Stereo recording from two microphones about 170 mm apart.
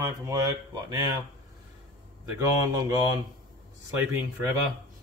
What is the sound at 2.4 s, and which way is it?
Speech, 20° right (ahead or behind).